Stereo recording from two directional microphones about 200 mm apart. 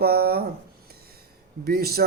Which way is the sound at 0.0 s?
50° right (ahead or behind).